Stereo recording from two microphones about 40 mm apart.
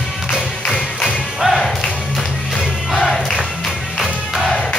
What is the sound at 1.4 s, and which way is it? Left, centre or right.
Music, centre.